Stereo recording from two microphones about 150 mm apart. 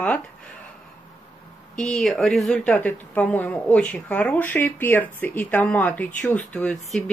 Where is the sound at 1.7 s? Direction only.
5° left (ahead or behind).